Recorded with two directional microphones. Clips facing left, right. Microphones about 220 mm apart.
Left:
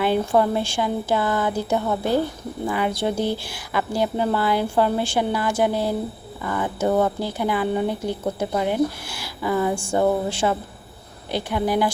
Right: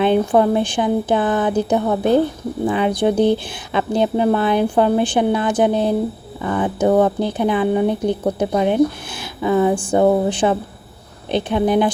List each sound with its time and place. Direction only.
0.0 s speech: 20° right (ahead or behind)